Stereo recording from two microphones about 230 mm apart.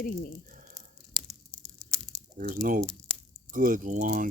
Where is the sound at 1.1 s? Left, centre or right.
Centre.